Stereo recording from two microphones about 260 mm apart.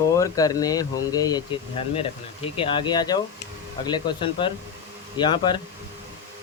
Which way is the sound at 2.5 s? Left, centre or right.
Centre.